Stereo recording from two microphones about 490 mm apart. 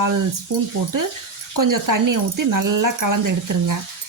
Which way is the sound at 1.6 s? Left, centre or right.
Right.